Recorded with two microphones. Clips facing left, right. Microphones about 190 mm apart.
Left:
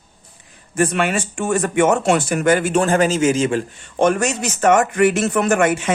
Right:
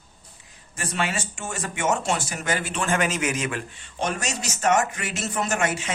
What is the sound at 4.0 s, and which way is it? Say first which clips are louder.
Speech: left 11 dB; 55° left (ahead or behind).